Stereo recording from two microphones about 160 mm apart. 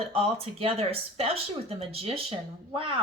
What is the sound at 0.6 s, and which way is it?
Speech, 40° right (ahead or behind).